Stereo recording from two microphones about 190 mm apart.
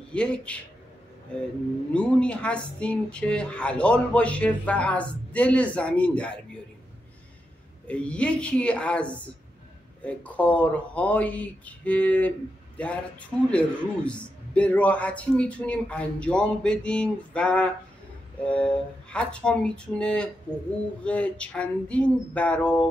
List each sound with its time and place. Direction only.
0.1 s a man's voice: 5° left (ahead or behind)
2.0 s speech: 5° left (ahead or behind)
7.8 s a man's voice: 5° left (ahead or behind)
10.0 s a man's voice: 5° left (ahead or behind)